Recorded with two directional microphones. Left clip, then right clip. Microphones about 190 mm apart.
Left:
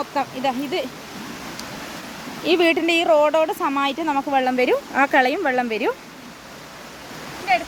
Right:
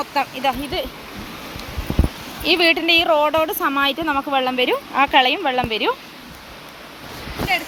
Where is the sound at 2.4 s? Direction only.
25° left (ahead or behind).